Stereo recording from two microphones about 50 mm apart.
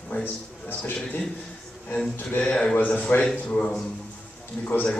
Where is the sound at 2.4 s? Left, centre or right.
Centre.